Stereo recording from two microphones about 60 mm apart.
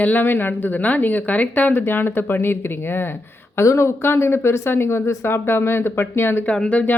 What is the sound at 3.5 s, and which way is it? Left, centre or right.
Speech, left.